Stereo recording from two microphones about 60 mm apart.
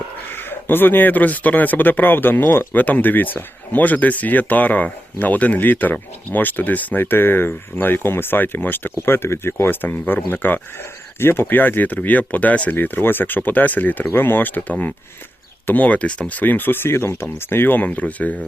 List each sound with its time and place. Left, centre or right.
0.3 s speech: left
9.6 s speech: left